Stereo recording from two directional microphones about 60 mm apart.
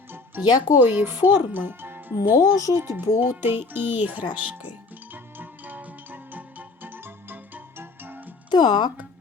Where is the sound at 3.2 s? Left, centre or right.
Right.